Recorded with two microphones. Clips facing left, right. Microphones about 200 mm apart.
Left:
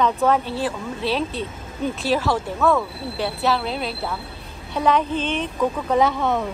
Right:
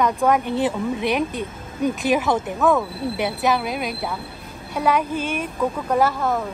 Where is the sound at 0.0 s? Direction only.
15° right (ahead or behind).